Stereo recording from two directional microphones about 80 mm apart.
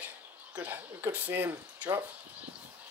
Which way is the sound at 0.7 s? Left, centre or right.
Right.